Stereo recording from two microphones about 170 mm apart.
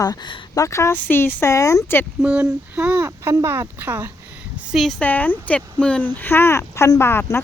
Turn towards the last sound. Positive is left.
turn(degrees=15)  # may be behind; listen again after turning